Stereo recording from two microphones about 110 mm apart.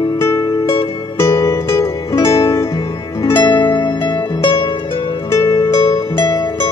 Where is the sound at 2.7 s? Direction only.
45° left (ahead or behind).